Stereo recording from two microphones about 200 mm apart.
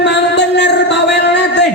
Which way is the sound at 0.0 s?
60° left (ahead or behind).